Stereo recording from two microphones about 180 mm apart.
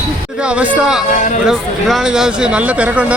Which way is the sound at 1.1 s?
45° left (ahead or behind).